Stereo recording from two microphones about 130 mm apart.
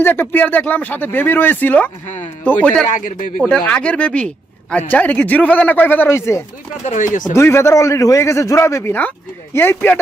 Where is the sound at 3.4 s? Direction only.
10° left (ahead or behind).